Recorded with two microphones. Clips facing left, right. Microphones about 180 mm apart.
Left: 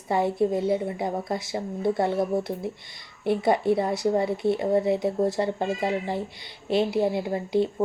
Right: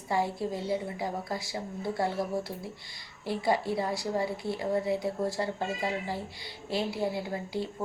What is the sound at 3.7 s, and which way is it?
A woman's voice, 20° left (ahead or behind).